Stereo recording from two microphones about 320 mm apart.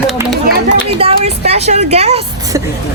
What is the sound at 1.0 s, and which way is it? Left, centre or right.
Speech, centre.